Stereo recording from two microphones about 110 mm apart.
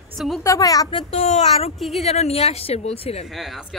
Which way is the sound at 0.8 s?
60° left (ahead or behind).